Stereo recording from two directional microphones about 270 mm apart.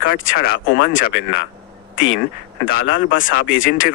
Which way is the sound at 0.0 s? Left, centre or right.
Left.